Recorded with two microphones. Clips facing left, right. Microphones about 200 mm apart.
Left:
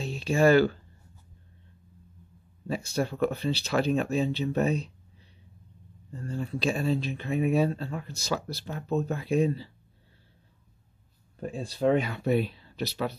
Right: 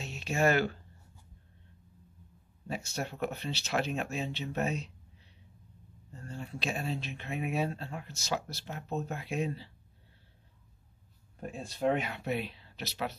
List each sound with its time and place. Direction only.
0.0 s speech: 35° left (ahead or behind)
2.7 s speech: 35° left (ahead or behind)
6.4 s speech: 35° left (ahead or behind)
11.3 s speech: 35° left (ahead or behind)